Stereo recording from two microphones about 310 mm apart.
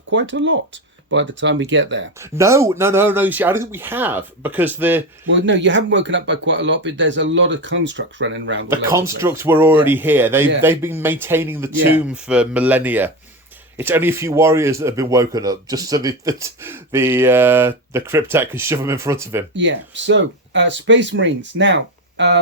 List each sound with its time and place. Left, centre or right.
0.1 s speech: right
2.2 s speech: centre
5.3 s speech: right
8.9 s speech: centre
19.5 s speech: right